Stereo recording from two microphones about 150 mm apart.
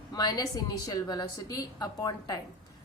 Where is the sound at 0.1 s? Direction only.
25° left (ahead or behind).